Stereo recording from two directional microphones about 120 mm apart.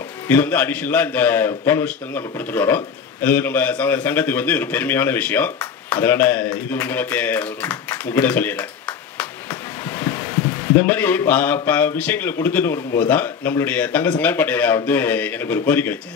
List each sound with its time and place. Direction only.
0.3 s speech: 15° left (ahead or behind)
9.2 s a sound: 20° left (ahead or behind)
10.7 s speech: 15° left (ahead or behind)